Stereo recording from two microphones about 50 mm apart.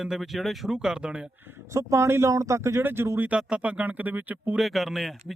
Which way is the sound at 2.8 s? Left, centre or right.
Right.